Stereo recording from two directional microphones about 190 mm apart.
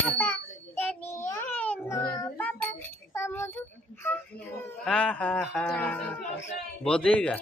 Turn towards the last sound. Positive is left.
turn(degrees=5)  # may be behind; listen again after turning